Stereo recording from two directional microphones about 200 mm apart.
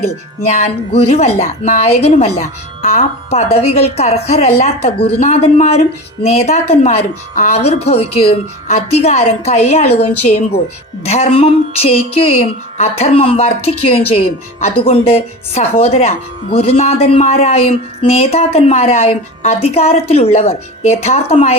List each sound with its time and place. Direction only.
0.3 s a woman's voice: 35° left (ahead or behind)